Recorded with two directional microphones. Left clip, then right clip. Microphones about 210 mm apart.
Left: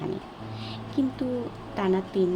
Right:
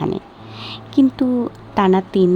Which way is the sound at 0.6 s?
50° right (ahead or behind).